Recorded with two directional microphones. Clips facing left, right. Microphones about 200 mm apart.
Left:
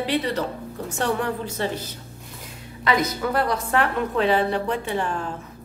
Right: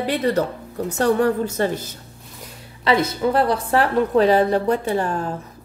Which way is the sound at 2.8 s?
30° right (ahead or behind).